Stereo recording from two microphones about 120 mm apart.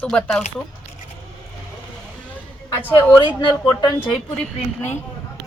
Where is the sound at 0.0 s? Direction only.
10° left (ahead or behind).